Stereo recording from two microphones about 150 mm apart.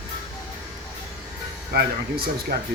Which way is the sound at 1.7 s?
90° right.